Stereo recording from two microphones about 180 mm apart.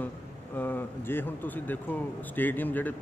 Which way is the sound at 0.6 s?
10° left (ahead or behind).